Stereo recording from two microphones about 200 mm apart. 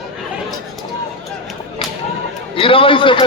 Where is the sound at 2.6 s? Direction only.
25° left (ahead or behind).